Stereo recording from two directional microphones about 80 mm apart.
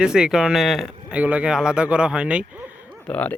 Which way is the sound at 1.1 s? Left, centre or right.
Centre.